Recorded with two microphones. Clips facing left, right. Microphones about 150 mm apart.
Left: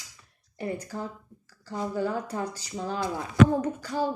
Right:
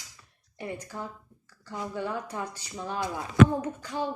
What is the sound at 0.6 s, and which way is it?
Speech, 35° left (ahead or behind).